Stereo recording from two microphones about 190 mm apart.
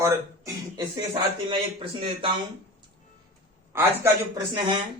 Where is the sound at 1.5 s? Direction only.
25° right (ahead or behind).